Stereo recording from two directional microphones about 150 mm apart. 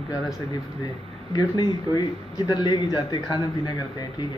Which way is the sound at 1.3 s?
25° left (ahead or behind).